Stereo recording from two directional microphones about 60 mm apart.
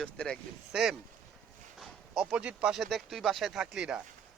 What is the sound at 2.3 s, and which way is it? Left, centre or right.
Speech, centre.